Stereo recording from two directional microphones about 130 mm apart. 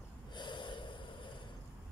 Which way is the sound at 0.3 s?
35° left (ahead or behind).